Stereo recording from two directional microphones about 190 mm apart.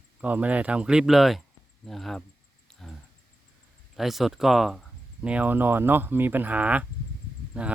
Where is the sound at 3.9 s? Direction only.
Centre (ahead or behind).